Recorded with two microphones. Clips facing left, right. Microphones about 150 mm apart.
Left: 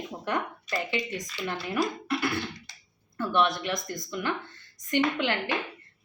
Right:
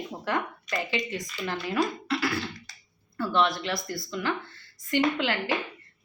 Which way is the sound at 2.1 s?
25° left (ahead or behind).